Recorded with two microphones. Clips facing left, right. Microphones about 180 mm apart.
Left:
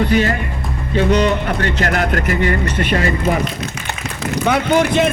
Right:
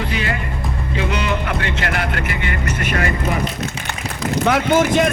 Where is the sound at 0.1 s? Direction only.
40° left (ahead or behind).